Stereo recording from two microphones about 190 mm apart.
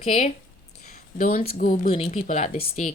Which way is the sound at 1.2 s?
50° left (ahead or behind).